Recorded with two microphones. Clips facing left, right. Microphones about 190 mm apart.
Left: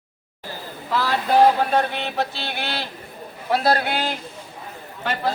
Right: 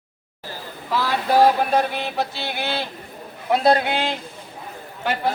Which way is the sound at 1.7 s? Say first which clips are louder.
Right 1 dB; 10° right (ahead or behind).